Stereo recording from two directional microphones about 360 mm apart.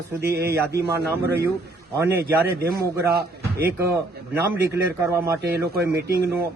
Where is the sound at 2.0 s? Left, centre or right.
Centre.